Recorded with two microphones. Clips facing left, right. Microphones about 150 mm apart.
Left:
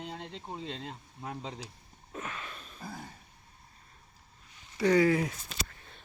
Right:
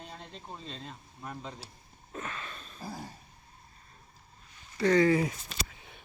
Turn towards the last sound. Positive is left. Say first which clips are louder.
# right 1 dB
turn(degrees=0)  # may be behind; listen again after turning